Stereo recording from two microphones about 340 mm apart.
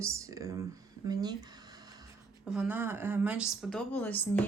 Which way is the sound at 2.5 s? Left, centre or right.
Centre.